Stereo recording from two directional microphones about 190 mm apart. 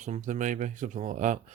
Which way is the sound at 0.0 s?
40° right (ahead or behind).